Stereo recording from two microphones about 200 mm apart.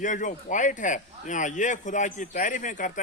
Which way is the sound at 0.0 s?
40° left (ahead or behind).